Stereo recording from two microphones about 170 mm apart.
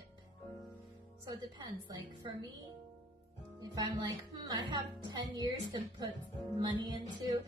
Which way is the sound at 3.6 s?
25° right (ahead or behind).